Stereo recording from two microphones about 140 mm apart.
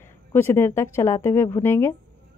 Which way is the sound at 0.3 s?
20° left (ahead or behind).